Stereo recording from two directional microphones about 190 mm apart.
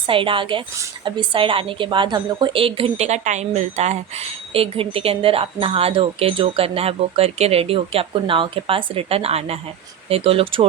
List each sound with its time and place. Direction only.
0.1 s a woman's voice: 25° right (ahead or behind)